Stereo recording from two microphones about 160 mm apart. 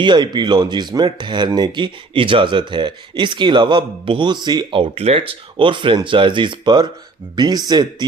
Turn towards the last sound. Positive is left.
turn(degrees=-25)  # may be behind; listen again after turning